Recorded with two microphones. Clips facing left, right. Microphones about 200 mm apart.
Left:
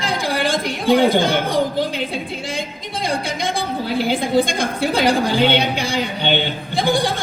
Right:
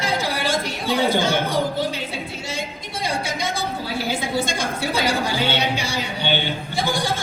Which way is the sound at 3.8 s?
55° left (ahead or behind).